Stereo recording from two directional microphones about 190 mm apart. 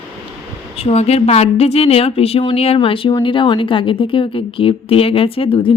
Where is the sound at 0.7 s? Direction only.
30° left (ahead or behind).